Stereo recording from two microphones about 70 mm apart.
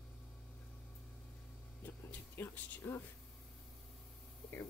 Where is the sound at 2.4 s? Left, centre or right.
Left.